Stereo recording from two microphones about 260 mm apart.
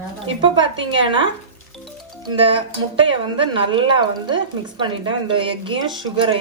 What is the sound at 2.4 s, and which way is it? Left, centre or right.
Speech, right.